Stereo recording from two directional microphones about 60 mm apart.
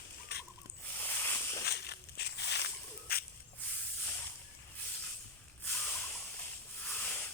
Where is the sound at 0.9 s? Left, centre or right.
Left.